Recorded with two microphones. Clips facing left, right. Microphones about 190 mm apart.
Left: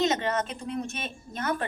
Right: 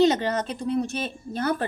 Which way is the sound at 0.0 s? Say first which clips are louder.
Right 5 dB; 35° right (ahead or behind).